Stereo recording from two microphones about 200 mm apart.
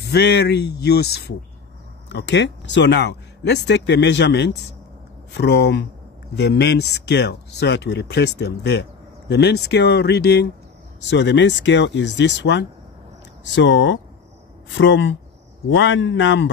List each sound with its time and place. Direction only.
0.1 s speech: 55° left (ahead or behind)